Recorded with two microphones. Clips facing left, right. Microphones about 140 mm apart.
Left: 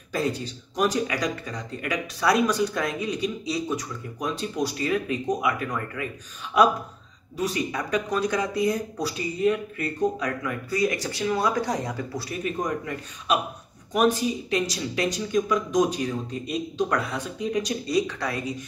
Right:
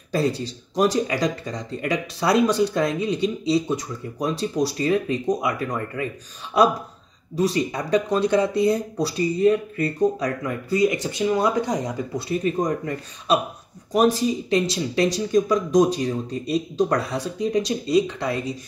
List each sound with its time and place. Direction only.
0.1 s speech: 35° right (ahead or behind)
7.3 s speech: 30° right (ahead or behind)
10.8 s speech: 20° right (ahead or behind)
12.4 s speech: 35° right (ahead or behind)